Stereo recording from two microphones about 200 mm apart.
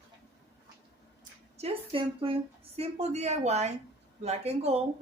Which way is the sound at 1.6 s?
30° right (ahead or behind).